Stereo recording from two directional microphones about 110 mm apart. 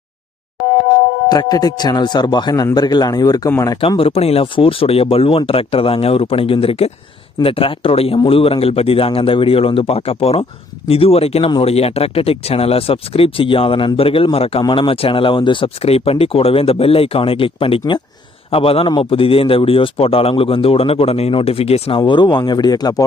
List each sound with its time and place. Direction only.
1.3 s speech: 40° left (ahead or behind)
3.8 s a man's voice: 55° left (ahead or behind)
14.6 s a man's voice: 50° left (ahead or behind); by 22.0 s 65° left (ahead or behind)
22.0 s speech: 45° left (ahead or behind)